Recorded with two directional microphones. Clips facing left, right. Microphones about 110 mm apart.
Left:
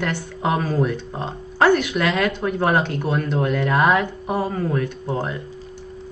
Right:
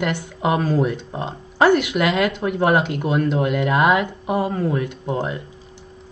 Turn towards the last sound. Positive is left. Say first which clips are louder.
# right 1 dB
turn(degrees=-15)  # may be behind; listen again after turning